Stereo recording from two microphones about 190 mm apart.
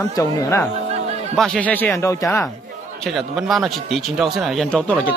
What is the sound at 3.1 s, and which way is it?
A man's voice, centre (ahead or behind).